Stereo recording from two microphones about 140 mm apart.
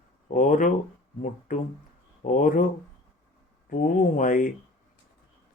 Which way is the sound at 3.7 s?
70° left (ahead or behind).